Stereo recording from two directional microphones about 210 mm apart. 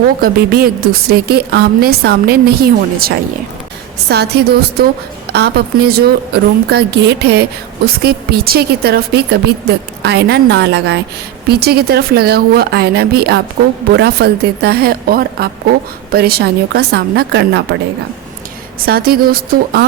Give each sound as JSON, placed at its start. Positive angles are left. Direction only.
{"t": 0.2, "sound": "a woman's voice", "side_deg": -45}
{"t": 4.1, "sound": "a woman's voice", "side_deg": -50}
{"t": 18.9, "sound": "a woman's voice", "side_deg": -45}